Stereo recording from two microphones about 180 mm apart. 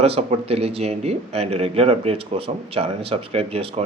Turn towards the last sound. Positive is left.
turn(degrees=-30)  # may be behind; listen again after turning